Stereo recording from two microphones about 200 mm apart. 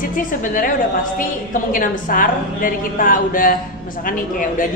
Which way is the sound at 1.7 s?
45° left (ahead or behind).